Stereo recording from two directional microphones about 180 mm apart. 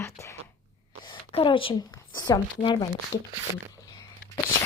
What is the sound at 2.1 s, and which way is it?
Speech, 20° left (ahead or behind).